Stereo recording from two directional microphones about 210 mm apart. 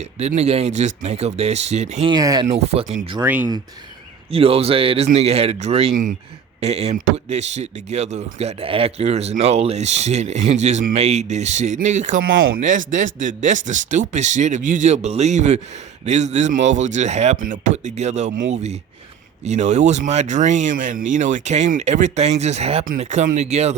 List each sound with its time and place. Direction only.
0.0 s speech: 30° right (ahead or behind)
2.1 s speech: 20° right (ahead or behind)
2.5 s speech: 30° right (ahead or behind)
3.2 s speech: 10° right (ahead or behind)
4.3 s speech: 25° right (ahead or behind)
18.3 s speech: 60° right (ahead or behind)
18.5 s speech: 30° right (ahead or behind)